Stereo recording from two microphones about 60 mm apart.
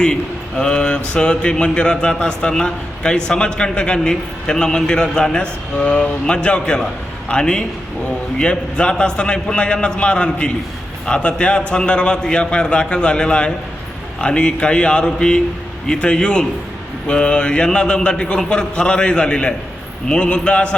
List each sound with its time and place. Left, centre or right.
0.0 s a man's voice: centre